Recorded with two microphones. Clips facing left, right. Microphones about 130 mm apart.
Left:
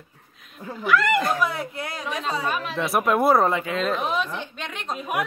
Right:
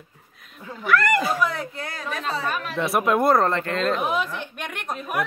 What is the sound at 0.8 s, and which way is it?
Speech, centre (ahead or behind).